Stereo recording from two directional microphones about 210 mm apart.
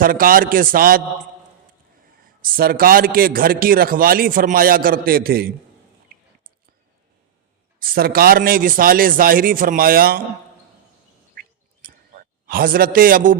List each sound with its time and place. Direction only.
0.0 s a man's voice: 40° right (ahead or behind)
2.2 s a man's voice: 40° right (ahead or behind)
7.8 s a man's voice: 45° right (ahead or behind)
11.3 s a sound: 45° right (ahead or behind)